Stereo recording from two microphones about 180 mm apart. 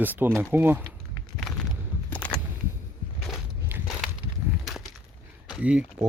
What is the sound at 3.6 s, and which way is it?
Walk, 10° right (ahead or behind).